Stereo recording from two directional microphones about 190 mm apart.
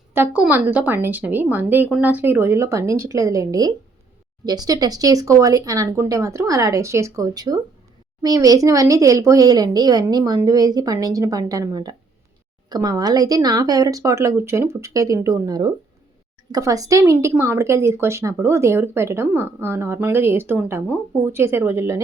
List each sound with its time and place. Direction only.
0.1 s a woman's voice: 10° right (ahead or behind)